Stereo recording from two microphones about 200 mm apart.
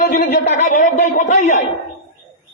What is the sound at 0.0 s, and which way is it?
A man's voice, 40° left (ahead or behind).